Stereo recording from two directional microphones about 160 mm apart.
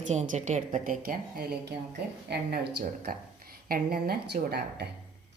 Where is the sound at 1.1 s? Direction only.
70° right (ahead or behind).